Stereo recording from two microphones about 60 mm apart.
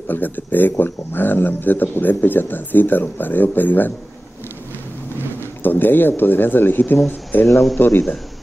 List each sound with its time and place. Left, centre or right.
0.1 s speech: left
5.6 s speech: left
7.4 s speech: centre